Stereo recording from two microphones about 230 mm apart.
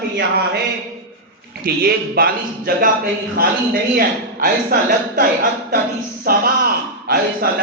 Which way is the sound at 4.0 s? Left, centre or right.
Right.